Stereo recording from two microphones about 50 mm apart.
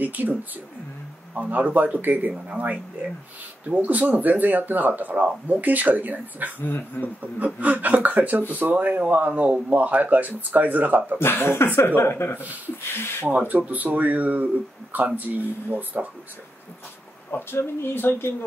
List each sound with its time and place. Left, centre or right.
0.0 s speech: right
7.0 s speech: left
7.3 s speech: right
11.1 s speech: left
12.0 s speech: left
12.4 s speech: right
12.8 s speech: left
13.4 s speech: right
17.3 s speech: left